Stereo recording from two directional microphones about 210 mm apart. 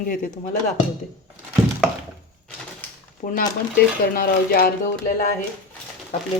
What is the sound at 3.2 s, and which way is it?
Speech, 35° left (ahead or behind).